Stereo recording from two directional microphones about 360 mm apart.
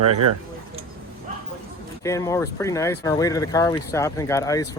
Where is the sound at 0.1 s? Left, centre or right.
Right.